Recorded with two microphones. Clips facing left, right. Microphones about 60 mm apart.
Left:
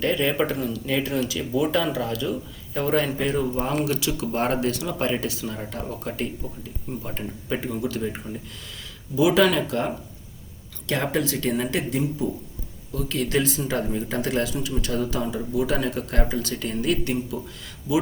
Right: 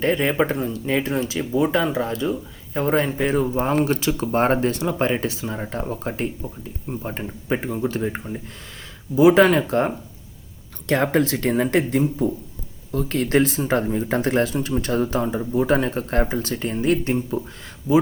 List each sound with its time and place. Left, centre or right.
0.0 s speech: right